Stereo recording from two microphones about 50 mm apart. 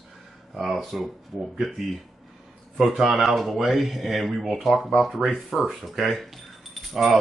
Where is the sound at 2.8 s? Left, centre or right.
Centre.